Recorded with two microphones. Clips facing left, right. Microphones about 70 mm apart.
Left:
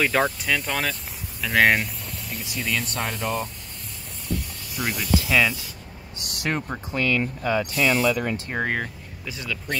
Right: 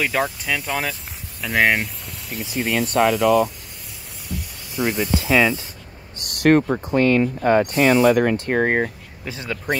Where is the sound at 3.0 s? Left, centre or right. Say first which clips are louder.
Right 11 dB; right.